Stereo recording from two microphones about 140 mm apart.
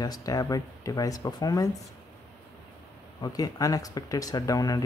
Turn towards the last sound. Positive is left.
turn(degrees=25)  # may be behind; listen again after turning